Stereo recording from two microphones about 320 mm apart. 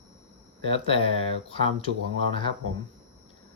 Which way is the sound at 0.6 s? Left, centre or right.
Centre.